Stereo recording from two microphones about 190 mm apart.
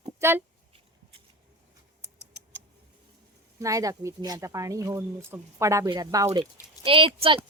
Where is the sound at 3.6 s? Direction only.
15° right (ahead or behind).